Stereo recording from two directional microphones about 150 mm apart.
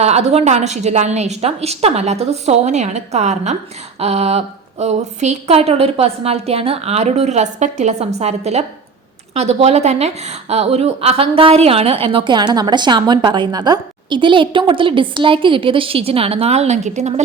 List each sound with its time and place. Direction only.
0.0 s a woman's voice: 45° right (ahead or behind)